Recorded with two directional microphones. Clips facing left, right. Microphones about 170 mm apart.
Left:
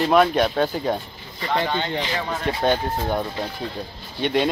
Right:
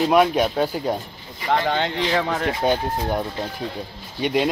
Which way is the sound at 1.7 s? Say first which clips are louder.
Right 3 dB; 90° right.